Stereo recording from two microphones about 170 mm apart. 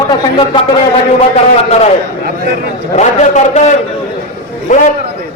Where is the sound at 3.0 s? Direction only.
45° left (ahead or behind).